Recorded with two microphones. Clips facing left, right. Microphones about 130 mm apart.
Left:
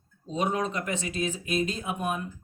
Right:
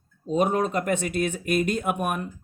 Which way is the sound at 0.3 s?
50° right (ahead or behind).